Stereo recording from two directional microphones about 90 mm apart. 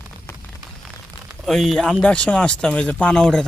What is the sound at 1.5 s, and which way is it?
Speech, 5° left (ahead or behind).